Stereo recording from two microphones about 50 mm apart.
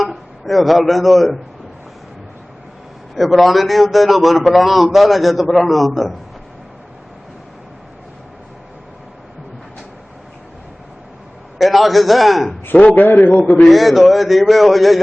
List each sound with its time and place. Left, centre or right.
0.0 s a man's voice: centre
3.2 s a man's voice: centre
11.5 s a man's voice: centre
12.7 s a man's voice: left
13.6 s a man's voice: centre